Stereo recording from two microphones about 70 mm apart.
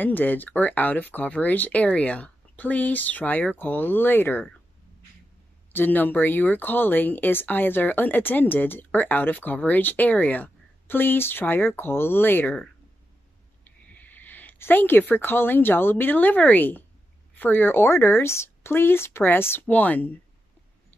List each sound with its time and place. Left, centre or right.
0.0 s speech: left
5.7 s speech: left
13.7 s speech: left